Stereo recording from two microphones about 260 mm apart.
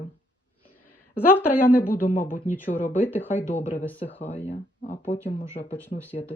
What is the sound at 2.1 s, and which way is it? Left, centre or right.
Speech, left.